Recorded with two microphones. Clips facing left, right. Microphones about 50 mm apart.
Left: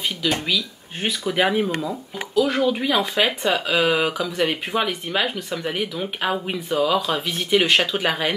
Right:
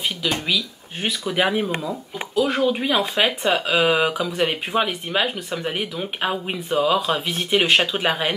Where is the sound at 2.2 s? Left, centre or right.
Right.